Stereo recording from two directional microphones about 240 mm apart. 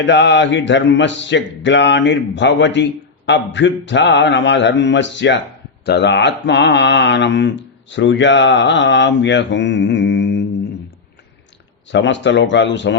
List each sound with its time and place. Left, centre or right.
0.0 s mantra: left
11.9 s mantra: left